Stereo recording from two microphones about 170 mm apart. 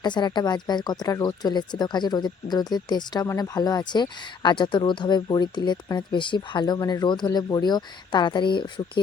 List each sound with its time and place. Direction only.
0.0 s speech: 25° left (ahead or behind)